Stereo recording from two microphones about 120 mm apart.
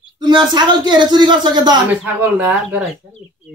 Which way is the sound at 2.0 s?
15° right (ahead or behind).